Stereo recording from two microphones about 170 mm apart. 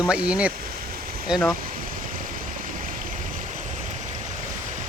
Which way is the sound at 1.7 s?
55° right (ahead or behind).